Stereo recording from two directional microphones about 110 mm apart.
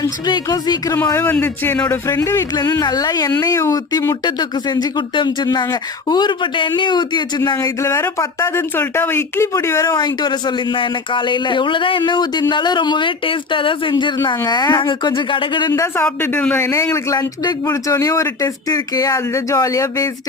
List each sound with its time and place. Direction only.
0.0 s speech: 35° left (ahead or behind)
1.0 s speech: 25° left (ahead or behind)
2.6 s speech: 35° left (ahead or behind)
4.3 s speech: 40° left (ahead or behind)
7.8 s speech: 25° left (ahead or behind)
10.0 s speech: 40° left (ahead or behind)
14.3 s speech: 40° left (ahead or behind)
15.7 s speech: 25° left (ahead or behind)
16.2 s speech: 15° left (ahead or behind)
16.7 s speech: 30° left (ahead or behind)